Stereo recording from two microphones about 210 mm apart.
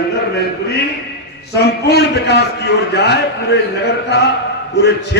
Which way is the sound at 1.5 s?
50° left (ahead or behind).